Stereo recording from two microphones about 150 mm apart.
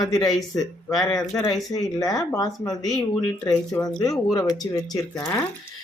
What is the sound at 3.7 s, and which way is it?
Speech, 20° left (ahead or behind).